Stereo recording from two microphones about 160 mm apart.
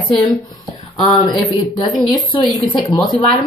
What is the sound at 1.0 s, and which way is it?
Speech, 25° left (ahead or behind).